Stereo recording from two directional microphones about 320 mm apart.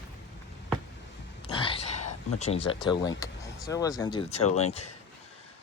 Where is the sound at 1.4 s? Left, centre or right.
Centre.